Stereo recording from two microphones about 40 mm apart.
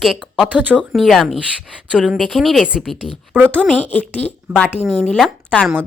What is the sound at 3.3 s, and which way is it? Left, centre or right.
Speech, right.